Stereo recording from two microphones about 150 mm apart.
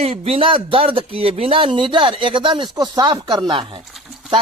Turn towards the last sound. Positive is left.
turn(degrees=0)  # may be behind; listen again after turning